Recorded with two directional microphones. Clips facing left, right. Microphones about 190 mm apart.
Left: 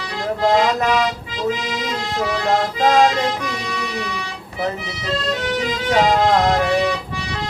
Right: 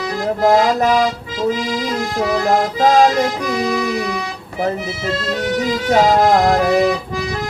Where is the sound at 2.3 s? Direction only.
45° right (ahead or behind).